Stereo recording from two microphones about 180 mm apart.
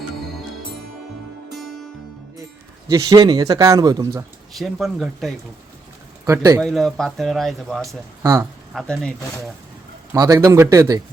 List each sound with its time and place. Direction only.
2.9 s speech: 20° right (ahead or behind)
4.5 s speech: centre (ahead or behind)
6.2 s speech: 20° right (ahead or behind)
6.6 s speech: centre (ahead or behind)
8.2 s speech: 20° right (ahead or behind)
8.7 s speech: 5° left (ahead or behind)
10.1 s speech: 20° right (ahead or behind)